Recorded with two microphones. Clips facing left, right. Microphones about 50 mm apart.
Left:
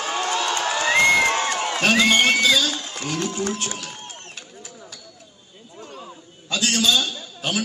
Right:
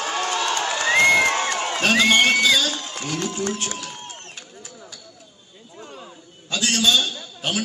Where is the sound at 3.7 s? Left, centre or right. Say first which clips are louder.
Right 1 dB; right.